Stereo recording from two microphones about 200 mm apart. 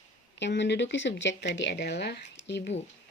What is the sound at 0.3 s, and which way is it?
Speech, 60° left (ahead or behind).